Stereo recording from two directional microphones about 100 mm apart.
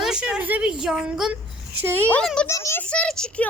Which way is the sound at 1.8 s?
20° right (ahead or behind).